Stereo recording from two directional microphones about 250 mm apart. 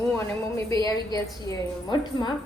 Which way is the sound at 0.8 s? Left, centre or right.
Centre.